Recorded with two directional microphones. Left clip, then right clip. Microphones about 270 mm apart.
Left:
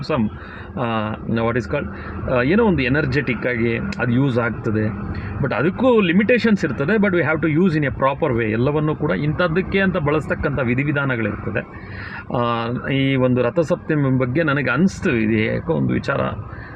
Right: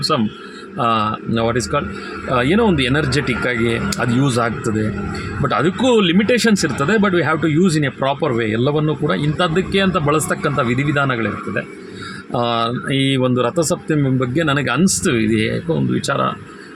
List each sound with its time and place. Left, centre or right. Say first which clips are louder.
0.8 s speech: right 6 dB; centre